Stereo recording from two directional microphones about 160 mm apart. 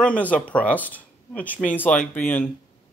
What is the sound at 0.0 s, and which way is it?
Speech, 10° left (ahead or behind).